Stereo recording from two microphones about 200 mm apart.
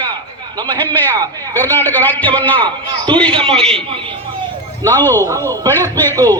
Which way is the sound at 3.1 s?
25° right (ahead or behind).